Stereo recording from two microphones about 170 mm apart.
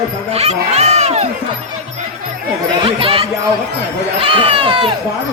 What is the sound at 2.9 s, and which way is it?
Speech, 30° right (ahead or behind).